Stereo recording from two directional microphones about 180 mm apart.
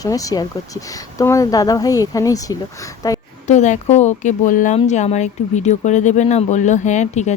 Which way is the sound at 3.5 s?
40° left (ahead or behind).